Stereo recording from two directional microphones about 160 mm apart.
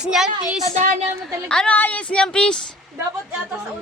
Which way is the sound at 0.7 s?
50° right (ahead or behind).